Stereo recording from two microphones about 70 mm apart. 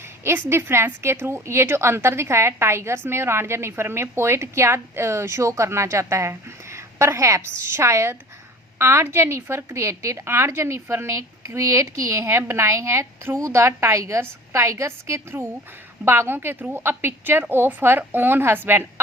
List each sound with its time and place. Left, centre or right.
0.3 s a woman's voice: right